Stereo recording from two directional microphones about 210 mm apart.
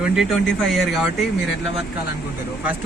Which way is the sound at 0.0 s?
Centre (ahead or behind).